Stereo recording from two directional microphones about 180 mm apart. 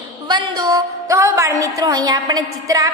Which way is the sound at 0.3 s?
20° right (ahead or behind).